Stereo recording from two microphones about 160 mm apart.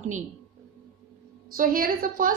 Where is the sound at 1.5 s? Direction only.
60° right (ahead or behind).